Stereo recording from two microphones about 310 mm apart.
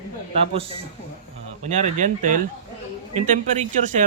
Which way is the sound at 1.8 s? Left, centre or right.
Right.